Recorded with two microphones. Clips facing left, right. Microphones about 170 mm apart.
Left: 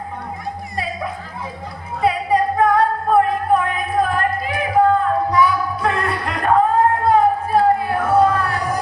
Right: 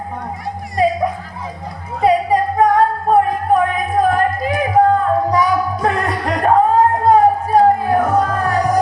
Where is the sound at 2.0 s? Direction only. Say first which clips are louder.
Right 3 dB; 40° right (ahead or behind).